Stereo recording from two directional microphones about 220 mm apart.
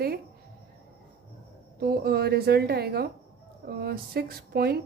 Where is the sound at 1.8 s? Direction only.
45° right (ahead or behind).